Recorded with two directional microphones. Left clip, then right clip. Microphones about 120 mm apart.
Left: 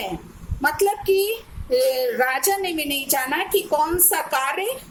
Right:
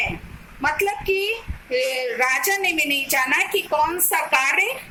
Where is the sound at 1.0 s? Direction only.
40° left (ahead or behind).